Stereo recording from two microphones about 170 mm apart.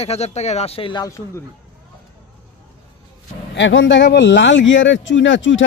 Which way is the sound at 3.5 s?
90° left.